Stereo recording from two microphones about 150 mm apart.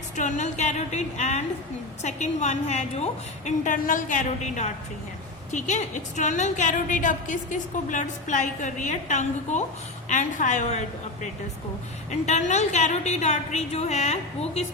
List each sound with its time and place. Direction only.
0.2 s a woman's voice: 55° left (ahead or behind)